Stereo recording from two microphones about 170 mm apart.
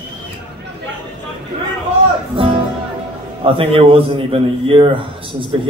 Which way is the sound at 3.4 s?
35° right (ahead or behind).